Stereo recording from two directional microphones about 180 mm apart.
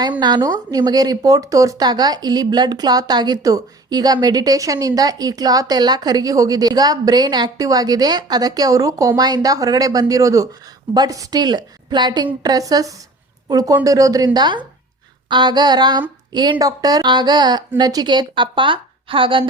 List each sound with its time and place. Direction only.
0.2 s speech: 25° right (ahead or behind)